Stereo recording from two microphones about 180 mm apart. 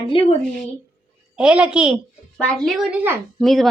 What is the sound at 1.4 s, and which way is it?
A woman's voice, 5° right (ahead or behind).